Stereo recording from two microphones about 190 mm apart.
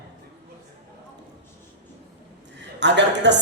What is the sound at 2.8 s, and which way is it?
Speech, 65° right (ahead or behind).